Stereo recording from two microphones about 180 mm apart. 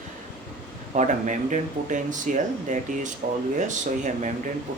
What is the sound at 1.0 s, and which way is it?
Speech, 45° right (ahead or behind).